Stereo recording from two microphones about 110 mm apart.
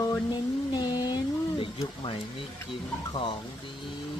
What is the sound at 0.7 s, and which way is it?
Speech, 40° left (ahead or behind).